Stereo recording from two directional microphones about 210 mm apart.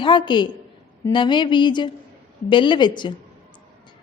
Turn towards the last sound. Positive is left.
turn(degrees=20)  # may be behind; listen again after turning